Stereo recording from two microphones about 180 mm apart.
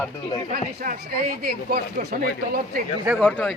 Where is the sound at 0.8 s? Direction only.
55° right (ahead or behind).